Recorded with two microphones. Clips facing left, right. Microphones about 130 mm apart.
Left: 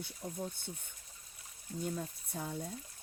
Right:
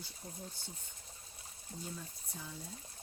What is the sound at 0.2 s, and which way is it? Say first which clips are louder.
Speech: left 7 dB; 50° left (ahead or behind).